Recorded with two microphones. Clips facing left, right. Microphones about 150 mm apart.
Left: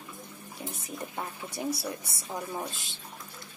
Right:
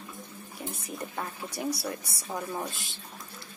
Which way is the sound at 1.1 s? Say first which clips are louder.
Right 1 dB; 25° left (ahead or behind).